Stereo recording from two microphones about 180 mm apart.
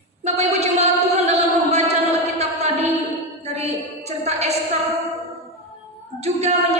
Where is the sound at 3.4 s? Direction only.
35° right (ahead or behind).